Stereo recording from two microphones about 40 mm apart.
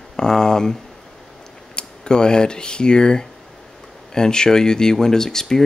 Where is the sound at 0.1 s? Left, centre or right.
Centre.